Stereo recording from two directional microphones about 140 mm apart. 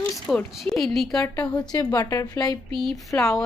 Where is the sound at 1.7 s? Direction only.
25° left (ahead or behind).